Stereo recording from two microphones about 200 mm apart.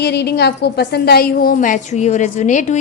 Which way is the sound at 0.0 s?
55° left (ahead or behind).